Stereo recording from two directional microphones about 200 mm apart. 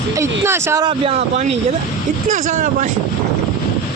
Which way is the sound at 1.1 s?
30° right (ahead or behind).